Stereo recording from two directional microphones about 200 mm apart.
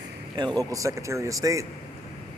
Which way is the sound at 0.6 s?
15° right (ahead or behind).